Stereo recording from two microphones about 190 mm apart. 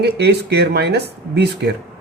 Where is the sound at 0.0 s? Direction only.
60° right (ahead or behind).